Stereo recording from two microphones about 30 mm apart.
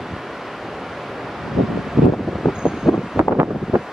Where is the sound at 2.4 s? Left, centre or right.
Centre.